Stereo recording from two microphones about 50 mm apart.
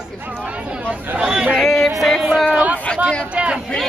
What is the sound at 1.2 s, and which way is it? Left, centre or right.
Chatter, centre.